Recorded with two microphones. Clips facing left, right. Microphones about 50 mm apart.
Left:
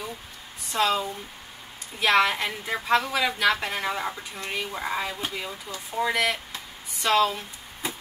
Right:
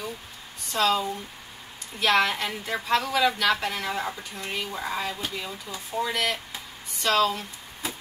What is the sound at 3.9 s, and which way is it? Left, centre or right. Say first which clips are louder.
A woman's voice: even; centre.